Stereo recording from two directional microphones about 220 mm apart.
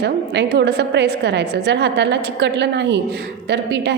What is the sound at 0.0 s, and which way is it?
A woman's voice, 50° right (ahead or behind).